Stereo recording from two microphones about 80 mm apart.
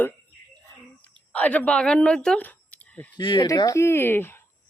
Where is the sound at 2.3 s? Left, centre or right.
Left.